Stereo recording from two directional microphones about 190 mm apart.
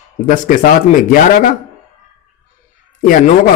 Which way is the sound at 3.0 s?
45° left (ahead or behind).